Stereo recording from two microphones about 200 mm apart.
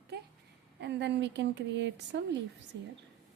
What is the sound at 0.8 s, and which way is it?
Speech, 60° right (ahead or behind).